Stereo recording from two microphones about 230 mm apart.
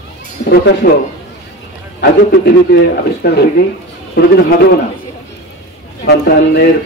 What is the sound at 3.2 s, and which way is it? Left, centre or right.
Speech, left.